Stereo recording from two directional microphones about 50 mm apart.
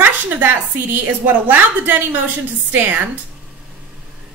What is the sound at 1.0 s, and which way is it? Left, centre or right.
A woman's voice, right.